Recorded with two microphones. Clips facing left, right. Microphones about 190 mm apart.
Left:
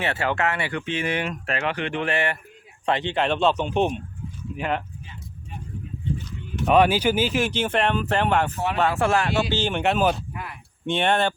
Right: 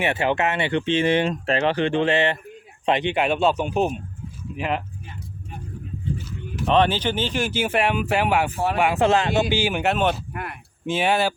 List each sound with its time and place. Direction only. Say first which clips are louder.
0.0 s speech: right 3 dB; 20° right (ahead or behind)
6.7 s speech: left 2 dB; 10° left (ahead or behind)
10.3 s a sound: right 3 dB; 60° right (ahead or behind)
10.8 s speech: right 1 dB; 5° right (ahead or behind)